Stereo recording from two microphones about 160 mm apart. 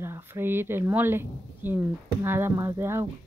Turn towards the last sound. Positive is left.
turn(degrees=-15)  # may be behind; listen again after turning